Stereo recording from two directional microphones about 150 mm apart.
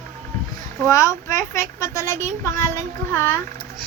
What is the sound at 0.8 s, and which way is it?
Speech, 20° left (ahead or behind).